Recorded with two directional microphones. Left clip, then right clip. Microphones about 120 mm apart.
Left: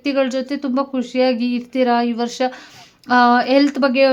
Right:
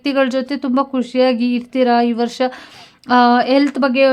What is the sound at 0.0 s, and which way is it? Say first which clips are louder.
A woman's voice: right 2 dB; 30° right (ahead or behind).